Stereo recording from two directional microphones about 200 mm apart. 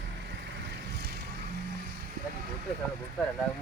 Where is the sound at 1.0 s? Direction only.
55° right (ahead or behind).